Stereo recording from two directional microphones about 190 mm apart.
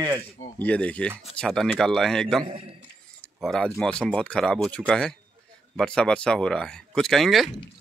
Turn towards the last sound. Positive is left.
turn(degrees=0)  # may be behind; listen again after turning